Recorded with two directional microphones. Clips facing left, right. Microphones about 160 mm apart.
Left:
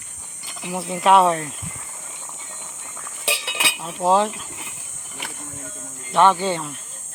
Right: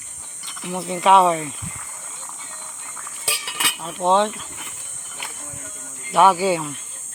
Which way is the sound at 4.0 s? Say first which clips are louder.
Even; 5° left (ahead or behind).